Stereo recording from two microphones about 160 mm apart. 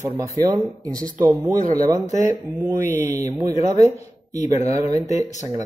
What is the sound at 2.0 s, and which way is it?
Speech, 50° left (ahead or behind).